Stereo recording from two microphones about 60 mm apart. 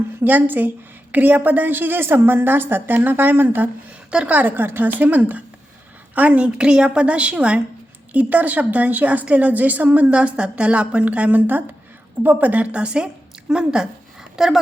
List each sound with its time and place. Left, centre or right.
0.3 s a woman's voice: right
4.1 s speech: centre
4.4 s a woman's voice: right; by 13.8 s centre
14.3 s speech: centre